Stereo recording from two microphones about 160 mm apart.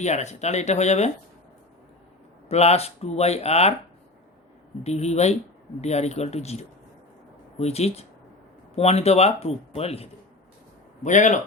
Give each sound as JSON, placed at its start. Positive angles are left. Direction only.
{"t": 0.0, "sound": "speech", "side_deg": 45}
{"t": 2.5, "sound": "speech", "side_deg": 40}
{"t": 4.8, "sound": "speech", "side_deg": 40}
{"t": 11.0, "sound": "speech", "side_deg": 50}